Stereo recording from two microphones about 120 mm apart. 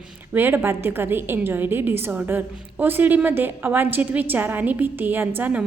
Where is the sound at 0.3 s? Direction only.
20° right (ahead or behind).